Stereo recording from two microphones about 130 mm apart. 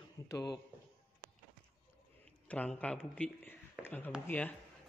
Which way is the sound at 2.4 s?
10° left (ahead or behind).